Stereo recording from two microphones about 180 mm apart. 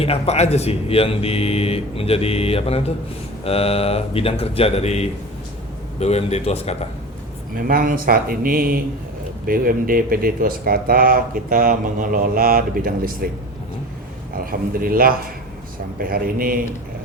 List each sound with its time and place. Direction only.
0.0 s speech: 35° left (ahead or behind)
7.5 s speech: 50° right (ahead or behind)